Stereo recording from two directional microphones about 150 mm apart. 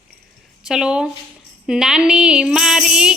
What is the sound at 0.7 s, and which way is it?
Speech, 5° right (ahead or behind).